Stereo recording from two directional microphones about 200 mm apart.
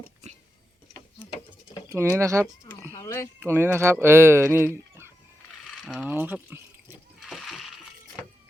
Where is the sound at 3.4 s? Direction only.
10° right (ahead or behind).